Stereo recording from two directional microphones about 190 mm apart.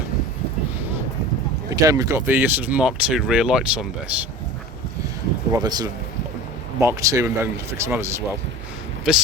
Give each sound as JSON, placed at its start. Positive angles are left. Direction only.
{"t": 1.7, "sound": "speech", "side_deg": -20}
{"t": 5.6, "sound": "speech", "side_deg": -20}
{"t": 9.1, "sound": "speech", "side_deg": -5}